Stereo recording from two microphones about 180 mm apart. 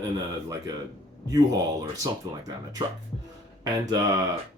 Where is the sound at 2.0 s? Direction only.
20° right (ahead or behind).